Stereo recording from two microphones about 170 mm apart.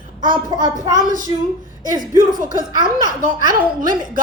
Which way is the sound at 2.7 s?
25° right (ahead or behind).